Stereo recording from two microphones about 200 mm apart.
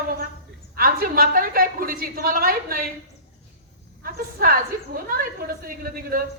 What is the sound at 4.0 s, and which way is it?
A man's voice, 45° right (ahead or behind).